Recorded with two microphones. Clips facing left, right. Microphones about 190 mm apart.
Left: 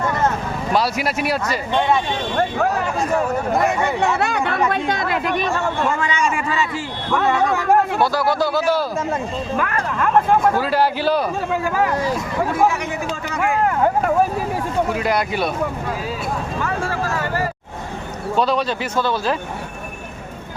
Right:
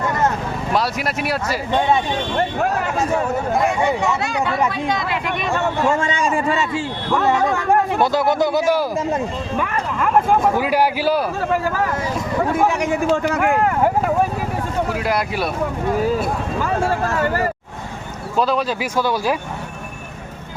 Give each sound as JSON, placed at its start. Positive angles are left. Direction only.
{"t": 0.7, "sound": "speech", "side_deg": 0}
{"t": 2.8, "sound": "speech", "side_deg": -5}
{"t": 4.0, "sound": "speech", "side_deg": 60}
{"t": 6.0, "sound": "a man's voice", "side_deg": -35}
{"t": 7.5, "sound": "speech", "side_deg": 5}
{"t": 8.0, "sound": "speech", "side_deg": -20}
{"t": 14.8, "sound": "speech", "side_deg": 0}
{"t": 18.3, "sound": "speech", "side_deg": -5}